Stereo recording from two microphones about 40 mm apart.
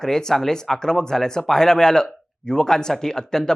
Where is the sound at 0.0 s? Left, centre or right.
Centre.